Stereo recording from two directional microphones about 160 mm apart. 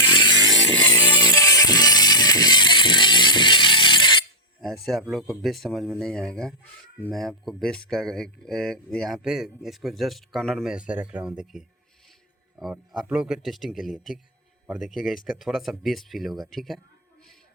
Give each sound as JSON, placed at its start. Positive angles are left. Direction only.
{"t": 0.0, "sound": "chainsaw", "side_deg": 30}
{"t": 1.2, "sound": "music", "side_deg": 20}
{"t": 4.6, "sound": "speech", "side_deg": 0}